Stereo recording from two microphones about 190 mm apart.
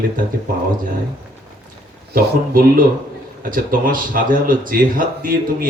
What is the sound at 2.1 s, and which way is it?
Speech, 50° right (ahead or behind).